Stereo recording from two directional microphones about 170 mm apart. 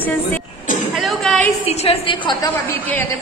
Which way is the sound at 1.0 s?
Centre (ahead or behind).